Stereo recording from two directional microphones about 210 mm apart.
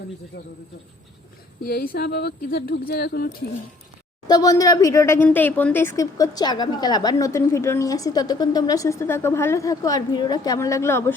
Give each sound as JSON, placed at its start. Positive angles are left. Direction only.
{"t": 0.3, "sound": "speech", "side_deg": 50}
{"t": 1.6, "sound": "speech", "side_deg": 45}
{"t": 4.3, "sound": "speech", "side_deg": 15}